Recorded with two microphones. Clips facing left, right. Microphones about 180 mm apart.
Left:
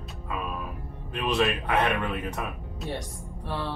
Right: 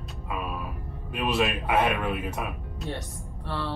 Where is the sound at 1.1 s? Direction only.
5° right (ahead or behind).